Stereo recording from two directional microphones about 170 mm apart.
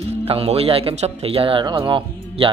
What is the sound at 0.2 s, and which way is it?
Speech, 35° right (ahead or behind).